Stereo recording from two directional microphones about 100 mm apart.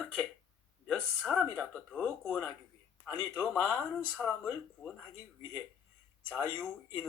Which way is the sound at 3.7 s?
15° left (ahead or behind).